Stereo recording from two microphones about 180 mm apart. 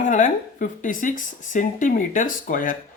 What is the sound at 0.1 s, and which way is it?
A woman's voice, 45° left (ahead or behind).